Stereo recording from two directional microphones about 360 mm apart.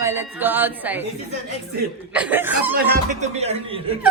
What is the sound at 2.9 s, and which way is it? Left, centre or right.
Speech, centre.